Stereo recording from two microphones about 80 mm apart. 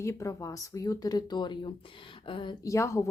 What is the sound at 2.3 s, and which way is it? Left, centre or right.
Speech, left.